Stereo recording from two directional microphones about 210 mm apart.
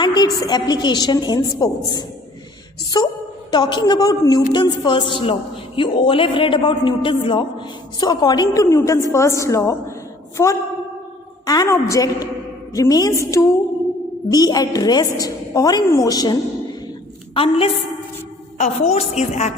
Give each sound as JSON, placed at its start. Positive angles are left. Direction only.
{"t": 0.0, "sound": "a woman's voice", "side_deg": 20}